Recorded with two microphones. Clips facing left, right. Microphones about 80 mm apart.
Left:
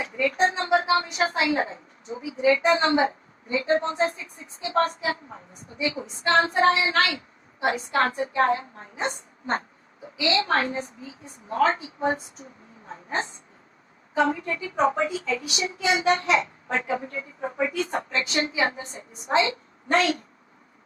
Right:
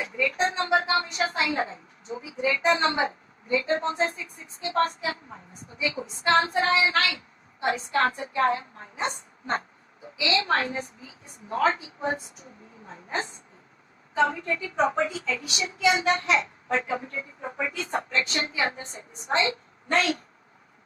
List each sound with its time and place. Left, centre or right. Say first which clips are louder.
0.0 s a woman's voice: left 3 dB; left
12.9 s speech: left 2 dB; left
18.3 s a woman's voice: left 3 dB; right